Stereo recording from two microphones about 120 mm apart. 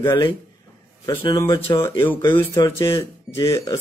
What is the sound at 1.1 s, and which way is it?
Speech, 45° left (ahead or behind).